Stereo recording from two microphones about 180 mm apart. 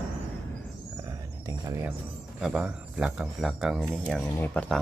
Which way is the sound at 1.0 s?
15° right (ahead or behind).